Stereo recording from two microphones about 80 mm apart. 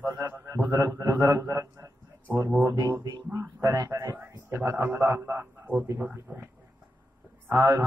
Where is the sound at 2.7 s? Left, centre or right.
Right.